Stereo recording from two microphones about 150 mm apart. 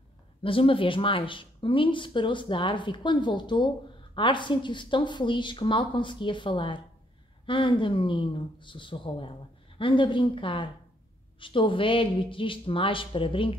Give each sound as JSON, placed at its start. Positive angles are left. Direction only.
{"t": 0.4, "sound": "speech", "side_deg": 35}